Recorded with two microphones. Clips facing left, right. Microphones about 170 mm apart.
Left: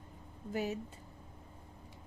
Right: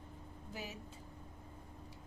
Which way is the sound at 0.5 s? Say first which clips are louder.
Left 11 dB; 50° left (ahead or behind).